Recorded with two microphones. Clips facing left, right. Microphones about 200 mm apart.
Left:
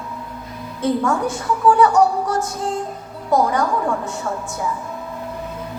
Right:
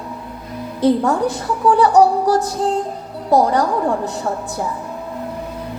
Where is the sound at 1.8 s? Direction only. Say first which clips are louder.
Right 2 dB; 35° right (ahead or behind).